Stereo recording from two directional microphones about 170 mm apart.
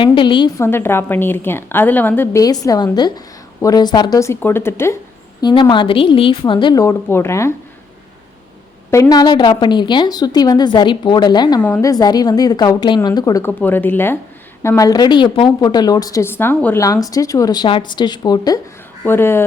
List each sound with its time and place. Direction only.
0.0 s a woman's voice: 30° left (ahead or behind)
0.6 s a woman's voice: 15° left (ahead or behind)
5.4 s a woman's voice: 25° left (ahead or behind)
8.9 s a woman's voice: 20° left (ahead or behind)
11.6 s a woman's voice: 10° left (ahead or behind)
11.9 s a woman's voice: 25° left (ahead or behind)